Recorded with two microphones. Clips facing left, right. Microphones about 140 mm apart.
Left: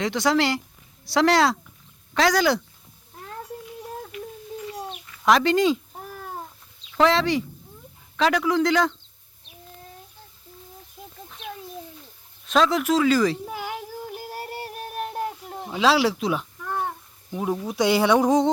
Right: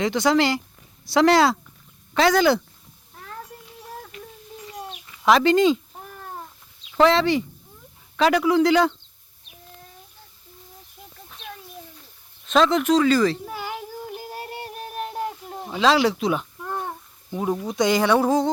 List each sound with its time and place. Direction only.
0.0 s speech: centre (ahead or behind)
5.2 s cat: centre (ahead or behind)
6.9 s speech: centre (ahead or behind)
12.5 s speech: centre (ahead or behind)
13.7 s music: 5° left (ahead or behind)
17.3 s speech: 5° right (ahead or behind)
17.7 s a sound: 10° left (ahead or behind)